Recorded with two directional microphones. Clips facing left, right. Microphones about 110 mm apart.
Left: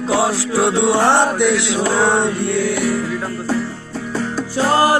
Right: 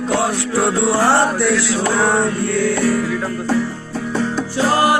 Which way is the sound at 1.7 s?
25° left (ahead or behind).